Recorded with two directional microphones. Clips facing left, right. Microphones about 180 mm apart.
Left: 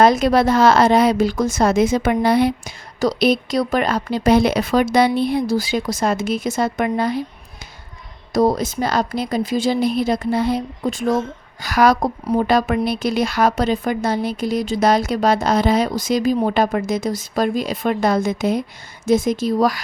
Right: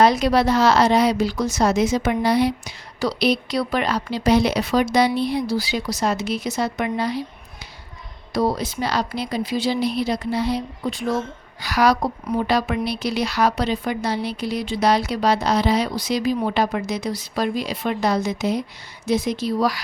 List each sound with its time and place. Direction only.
0.0 s a woman's voice: 50° left (ahead or behind)
8.3 s a woman's voice: 45° left (ahead or behind)